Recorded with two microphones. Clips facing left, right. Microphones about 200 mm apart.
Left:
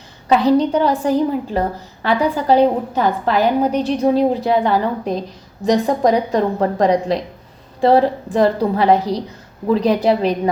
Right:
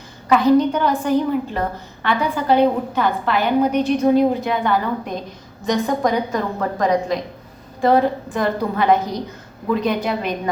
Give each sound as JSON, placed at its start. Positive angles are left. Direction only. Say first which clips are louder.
{"t": 0.3, "sound": "a woman's voice", "louder": "left 1 dB", "side_deg": 35}